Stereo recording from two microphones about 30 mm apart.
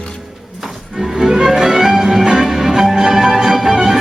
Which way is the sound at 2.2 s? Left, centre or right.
Right.